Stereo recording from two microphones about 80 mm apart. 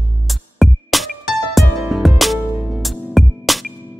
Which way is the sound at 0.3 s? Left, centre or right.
Centre.